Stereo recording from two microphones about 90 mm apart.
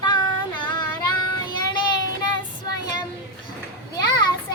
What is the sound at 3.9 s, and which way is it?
Children playing, 50° left (ahead or behind).